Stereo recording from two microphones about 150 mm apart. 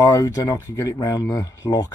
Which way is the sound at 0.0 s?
20° left (ahead or behind).